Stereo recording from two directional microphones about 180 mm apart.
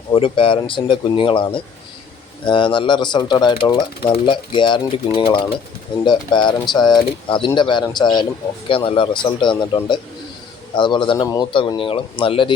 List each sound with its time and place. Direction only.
0.1 s speech: 30° left (ahead or behind)